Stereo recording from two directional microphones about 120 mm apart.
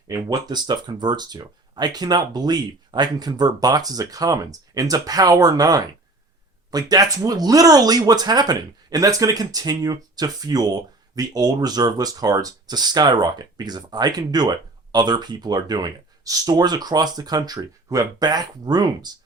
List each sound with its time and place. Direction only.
0.1 s speech: 30° right (ahead or behind)